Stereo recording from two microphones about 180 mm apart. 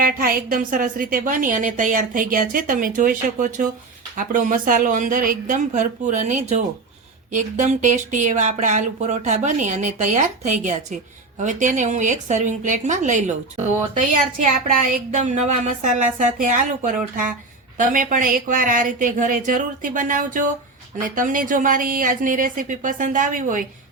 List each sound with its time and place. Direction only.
0.0 s a woman's voice: 55° right (ahead or behind)